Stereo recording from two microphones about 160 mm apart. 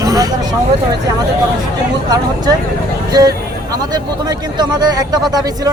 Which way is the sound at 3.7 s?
25° right (ahead or behind).